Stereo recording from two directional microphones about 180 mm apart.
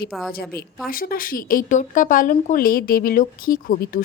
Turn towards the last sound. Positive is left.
turn(degrees=50)  # may be behind; listen again after turning